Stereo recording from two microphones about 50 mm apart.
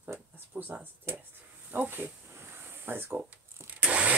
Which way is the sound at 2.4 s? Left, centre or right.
Right.